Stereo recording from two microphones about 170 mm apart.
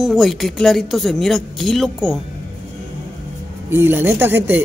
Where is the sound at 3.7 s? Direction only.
10° right (ahead or behind).